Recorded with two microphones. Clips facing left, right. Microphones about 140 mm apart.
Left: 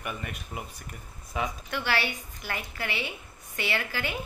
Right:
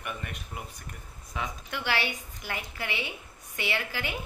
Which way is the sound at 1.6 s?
15° right (ahead or behind).